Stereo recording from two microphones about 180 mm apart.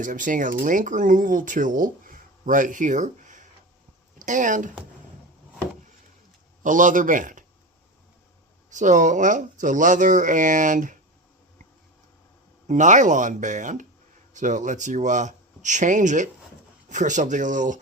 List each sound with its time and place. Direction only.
0.0 s speech: 45° right (ahead or behind)
6.6 s speech: 45° right (ahead or behind)
8.7 s speech: 45° right (ahead or behind)
12.6 s speech: 45° right (ahead or behind)